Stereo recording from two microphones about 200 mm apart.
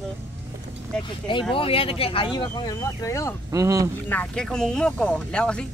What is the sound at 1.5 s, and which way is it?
Speech, 25° left (ahead or behind).